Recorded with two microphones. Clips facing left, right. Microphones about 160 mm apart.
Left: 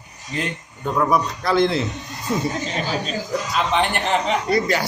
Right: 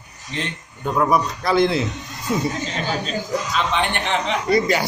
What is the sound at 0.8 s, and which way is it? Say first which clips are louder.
Speech: right 1 dB; 10° right (ahead or behind).